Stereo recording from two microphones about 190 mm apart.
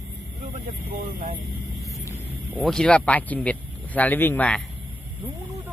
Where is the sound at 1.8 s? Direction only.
15° left (ahead or behind).